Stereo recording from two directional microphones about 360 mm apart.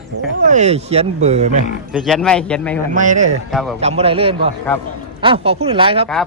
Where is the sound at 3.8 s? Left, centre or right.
Centre.